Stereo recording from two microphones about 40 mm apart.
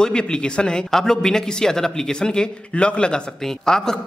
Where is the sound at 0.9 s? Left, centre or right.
Centre.